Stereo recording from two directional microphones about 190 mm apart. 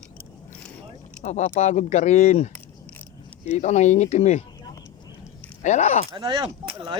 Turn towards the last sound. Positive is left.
turn(degrees=-25)  # may be behind; listen again after turning